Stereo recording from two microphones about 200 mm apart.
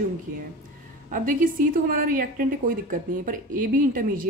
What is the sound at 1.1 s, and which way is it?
A woman's voice, 45° right (ahead or behind).